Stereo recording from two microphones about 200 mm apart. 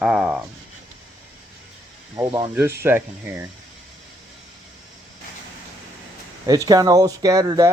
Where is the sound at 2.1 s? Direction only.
15° right (ahead or behind).